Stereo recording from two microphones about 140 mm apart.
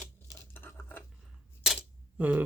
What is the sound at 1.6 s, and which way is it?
Camera, 5° right (ahead or behind).